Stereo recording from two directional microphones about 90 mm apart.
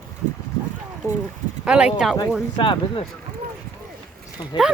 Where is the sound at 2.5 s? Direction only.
65° left (ahead or behind).